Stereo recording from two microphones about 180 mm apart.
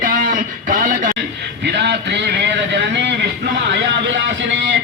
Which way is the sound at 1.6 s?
70° right (ahead or behind).